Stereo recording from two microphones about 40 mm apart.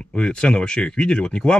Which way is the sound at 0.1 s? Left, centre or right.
Left.